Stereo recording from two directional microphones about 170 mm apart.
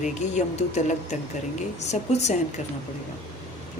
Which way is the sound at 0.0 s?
45° left (ahead or behind).